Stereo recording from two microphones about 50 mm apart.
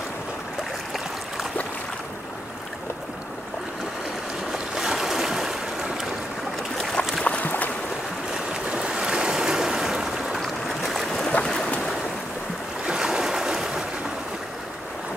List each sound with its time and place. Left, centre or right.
4.5 s boat: centre
6.8 s boat: centre
7.2 s a sound: left
8.6 s waves: centre
10.4 s boat: centre
12.8 s a sound: centre